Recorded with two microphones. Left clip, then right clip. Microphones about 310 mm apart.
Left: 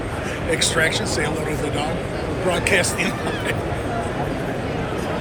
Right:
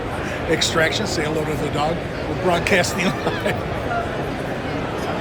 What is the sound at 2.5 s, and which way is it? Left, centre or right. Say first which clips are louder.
Speech: right 1 dB; centre.